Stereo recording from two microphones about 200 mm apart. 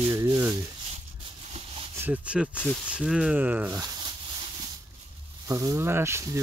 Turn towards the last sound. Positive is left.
turn(degrees=-15)  # may be behind; listen again after turning